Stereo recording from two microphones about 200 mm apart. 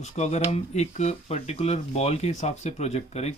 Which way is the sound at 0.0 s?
35° left (ahead or behind).